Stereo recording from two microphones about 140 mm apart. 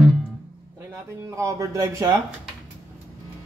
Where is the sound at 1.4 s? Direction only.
25° right (ahead or behind).